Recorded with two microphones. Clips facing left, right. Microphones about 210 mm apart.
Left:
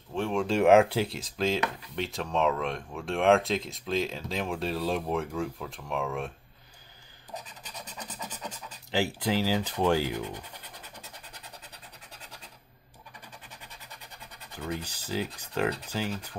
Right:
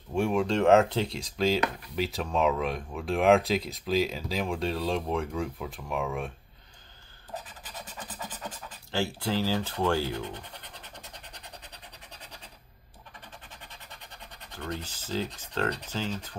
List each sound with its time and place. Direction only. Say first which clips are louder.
0.1 s speech: right 3 dB; 5° right (ahead or behind)
0.5 s speech: left 3 dB; 10° left (ahead or behind)
8.9 s speech: left 2 dB; 15° left (ahead or behind)
14.5 s speech: left 1 dB; 10° left (ahead or behind)